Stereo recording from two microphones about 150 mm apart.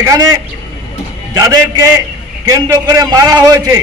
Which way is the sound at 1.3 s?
25° right (ahead or behind).